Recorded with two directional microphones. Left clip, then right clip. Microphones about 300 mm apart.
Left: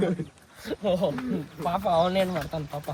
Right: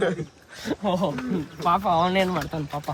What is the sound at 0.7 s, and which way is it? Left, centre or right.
Speech, centre.